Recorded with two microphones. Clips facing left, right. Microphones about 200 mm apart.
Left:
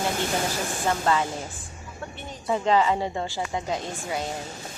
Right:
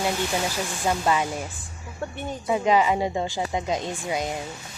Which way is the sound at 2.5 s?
15° right (ahead or behind).